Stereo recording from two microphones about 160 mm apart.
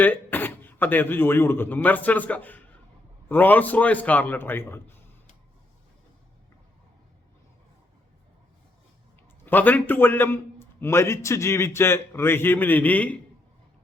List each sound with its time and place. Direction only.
0.0 s a man's voice: 10° left (ahead or behind)
9.5 s a man's voice: 10° left (ahead or behind)